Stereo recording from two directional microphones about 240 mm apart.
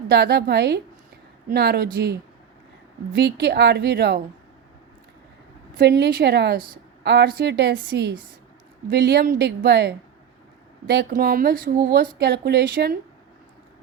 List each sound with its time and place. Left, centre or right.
0.1 s a woman's voice: right
3.2 s a woman's voice: right
5.8 s a woman's voice: right